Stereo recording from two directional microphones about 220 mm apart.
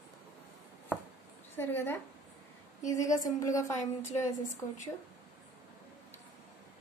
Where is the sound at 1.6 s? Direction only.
10° left (ahead or behind).